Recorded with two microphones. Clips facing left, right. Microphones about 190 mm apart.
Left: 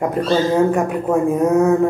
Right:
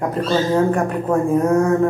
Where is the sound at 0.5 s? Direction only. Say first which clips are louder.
Left 1 dB; 10° left (ahead or behind).